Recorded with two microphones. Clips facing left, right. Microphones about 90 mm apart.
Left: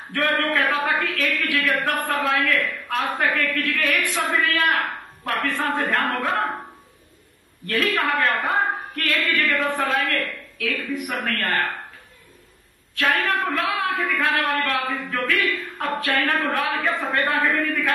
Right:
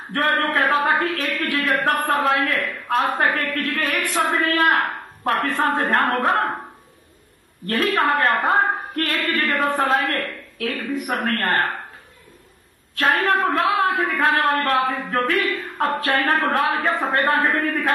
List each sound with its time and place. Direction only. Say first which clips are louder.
0.4 s a sound: right 3 dB; 30° right (ahead or behind)
1.0 s a woman's voice: right 1 dB; 35° right (ahead or behind)
2.9 s a woman's voice: right 4 dB; 45° right (ahead or behind)
7.6 s a woman's voice: right 3 dB; 40° right (ahead or behind)
12.9 s a woman's voice: right 3 dB; 35° right (ahead or behind)
14.0 s a man's voice: right 3 dB; 25° right (ahead or behind)